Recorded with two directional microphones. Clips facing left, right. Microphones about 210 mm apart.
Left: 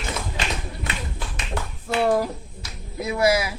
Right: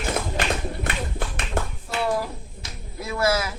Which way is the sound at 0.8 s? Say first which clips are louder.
Right 3 dB; 55° right (ahead or behind).